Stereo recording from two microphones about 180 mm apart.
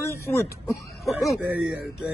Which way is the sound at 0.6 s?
Centre (ahead or behind).